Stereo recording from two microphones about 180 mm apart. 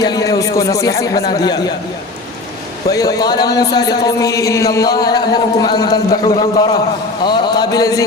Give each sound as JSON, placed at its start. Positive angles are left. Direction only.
{"t": 0.0, "sound": "speech", "side_deg": 20}
{"t": 2.9, "sound": "speech", "side_deg": 20}